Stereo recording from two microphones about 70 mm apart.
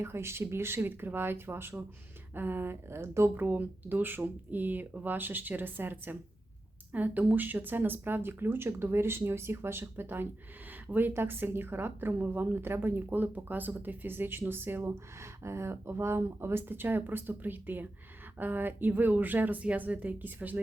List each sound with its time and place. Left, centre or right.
0.0 s a woman's voice: right